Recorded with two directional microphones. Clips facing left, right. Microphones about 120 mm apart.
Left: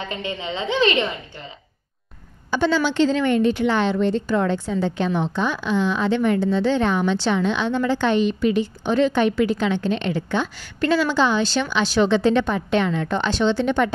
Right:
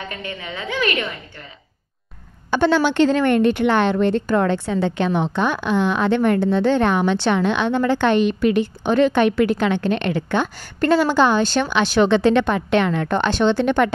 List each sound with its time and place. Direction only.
0.1 s a woman's voice: 20° left (ahead or behind)
2.5 s a woman's voice: 60° right (ahead or behind)